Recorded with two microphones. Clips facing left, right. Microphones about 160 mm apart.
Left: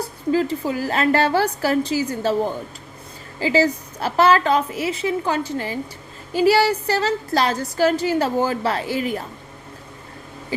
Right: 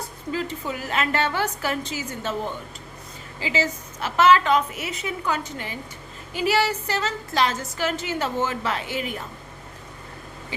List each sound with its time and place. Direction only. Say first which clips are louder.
0.3 s a woman's voice: left 8 dB; 35° left (ahead or behind)